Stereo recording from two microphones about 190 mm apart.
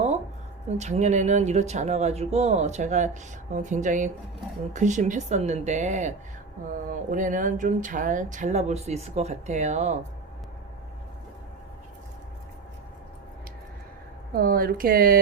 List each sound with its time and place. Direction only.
0.8 s speech: 35° right (ahead or behind)
14.3 s speech: 50° right (ahead or behind)